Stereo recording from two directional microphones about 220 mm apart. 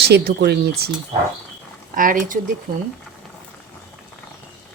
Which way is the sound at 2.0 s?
40° right (ahead or behind).